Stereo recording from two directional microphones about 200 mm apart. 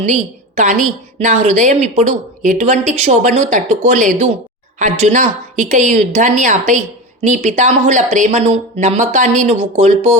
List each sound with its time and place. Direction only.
0.0 s a woman's voice: 40° right (ahead or behind)